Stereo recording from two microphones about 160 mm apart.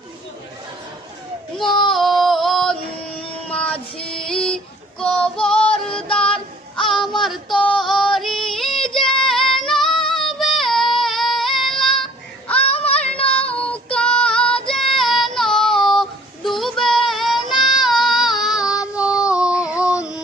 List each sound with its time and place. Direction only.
1.6 s child singing: 30° left (ahead or behind)
1.9 s female singing: centre (ahead or behind)
3.2 s child singing: 5° left (ahead or behind)
7.8 s female singing: centre (ahead or behind)
10.1 s child singing: centre (ahead or behind)
12.5 s child singing: 40° left (ahead or behind)
13.3 s child singing: 10° left (ahead or behind)
20.0 s a sound: 5° right (ahead or behind)